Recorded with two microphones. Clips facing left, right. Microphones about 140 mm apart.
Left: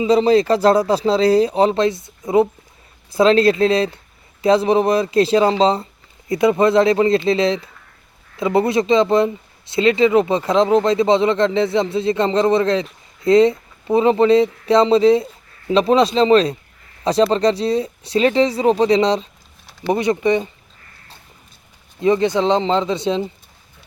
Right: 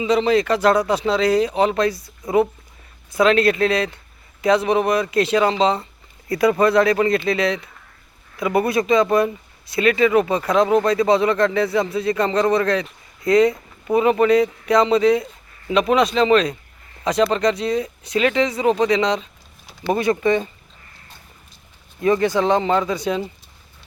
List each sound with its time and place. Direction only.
0.0 s speech: 35° left (ahead or behind)
6.2 s speech: 20° left (ahead or behind)
19.8 s speech: 20° left (ahead or behind)
22.0 s speech: 20° left (ahead or behind)